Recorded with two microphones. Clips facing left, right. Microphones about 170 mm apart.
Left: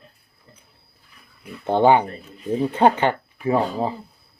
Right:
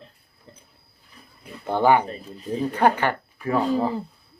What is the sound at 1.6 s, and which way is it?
Speech, 20° left (ahead or behind).